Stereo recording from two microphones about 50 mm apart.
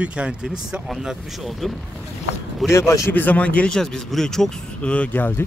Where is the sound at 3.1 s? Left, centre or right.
Left.